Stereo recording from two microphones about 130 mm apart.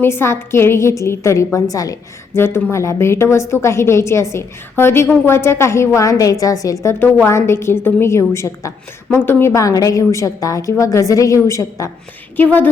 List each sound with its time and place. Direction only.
0.0 s a woman's voice: 20° left (ahead or behind)
12.4 s a woman's voice: 15° left (ahead or behind)